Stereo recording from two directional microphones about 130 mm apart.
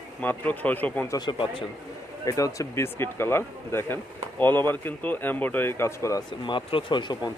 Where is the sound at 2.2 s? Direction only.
25° left (ahead or behind).